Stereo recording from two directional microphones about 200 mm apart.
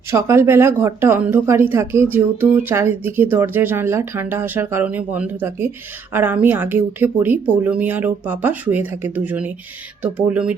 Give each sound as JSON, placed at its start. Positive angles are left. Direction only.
{"t": 0.1, "sound": "a woman's voice", "side_deg": -15}